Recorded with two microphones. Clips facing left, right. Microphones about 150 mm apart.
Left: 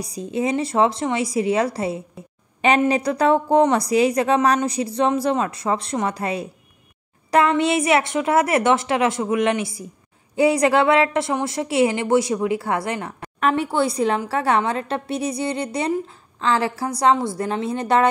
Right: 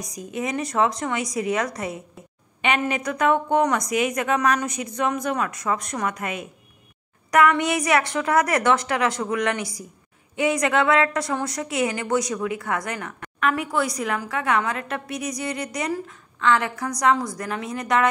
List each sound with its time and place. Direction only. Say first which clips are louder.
0.0 s a woman's voice: left 6 dB; 30° left (ahead or behind)